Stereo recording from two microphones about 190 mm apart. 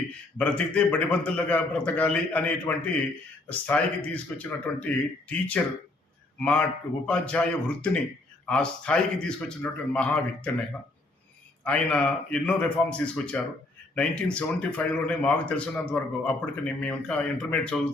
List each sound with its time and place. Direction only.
0.3 s a man's voice: 5° left (ahead or behind)
11.6 s speech: 5° left (ahead or behind)